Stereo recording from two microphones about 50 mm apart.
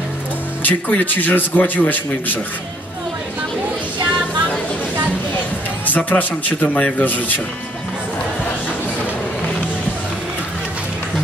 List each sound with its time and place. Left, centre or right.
0.7 s a man's voice: left
5.9 s a man's voice: left